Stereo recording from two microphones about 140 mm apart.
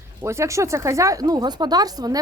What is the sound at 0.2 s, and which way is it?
Speech, 20° right (ahead or behind).